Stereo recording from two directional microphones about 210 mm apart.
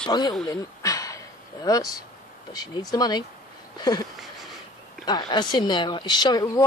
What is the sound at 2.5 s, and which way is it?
Speech, 20° left (ahead or behind).